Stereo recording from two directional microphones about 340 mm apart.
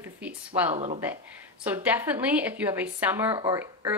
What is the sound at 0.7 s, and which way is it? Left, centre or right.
Speech, centre.